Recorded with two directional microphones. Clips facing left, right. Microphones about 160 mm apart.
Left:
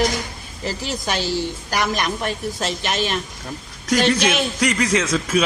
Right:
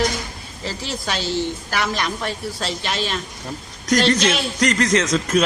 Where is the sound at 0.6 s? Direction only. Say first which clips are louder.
Left 2 dB; 15° left (ahead or behind).